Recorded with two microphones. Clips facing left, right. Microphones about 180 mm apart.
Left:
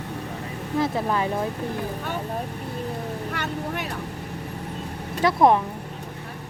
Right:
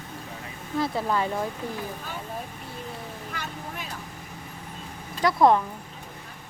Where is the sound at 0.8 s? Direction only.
15° left (ahead or behind).